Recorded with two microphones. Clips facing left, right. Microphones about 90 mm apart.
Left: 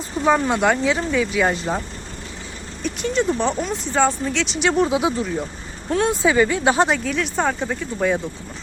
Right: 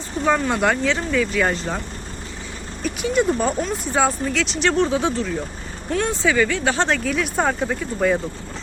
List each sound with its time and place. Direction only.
0.3 s speech: 10° left (ahead or behind)
2.8 s speech: 5° right (ahead or behind); by 5.3 s 10° left (ahead or behind)
5.9 s speech: 25° left (ahead or behind)
6.7 s speech: 5° left (ahead or behind)